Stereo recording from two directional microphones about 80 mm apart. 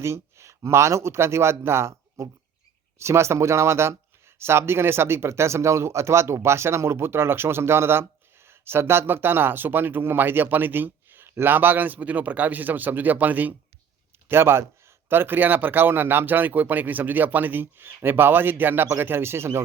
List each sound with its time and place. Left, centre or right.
0.0 s speech: right